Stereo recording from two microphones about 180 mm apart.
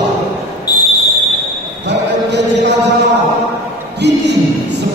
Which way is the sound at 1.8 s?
70° right (ahead or behind).